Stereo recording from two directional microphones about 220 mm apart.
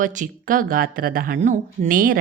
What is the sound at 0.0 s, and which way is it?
Speech, 35° right (ahead or behind).